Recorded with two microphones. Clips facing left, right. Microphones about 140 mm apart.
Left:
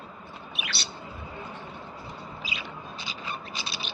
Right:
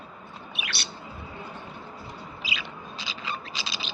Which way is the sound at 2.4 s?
90° right.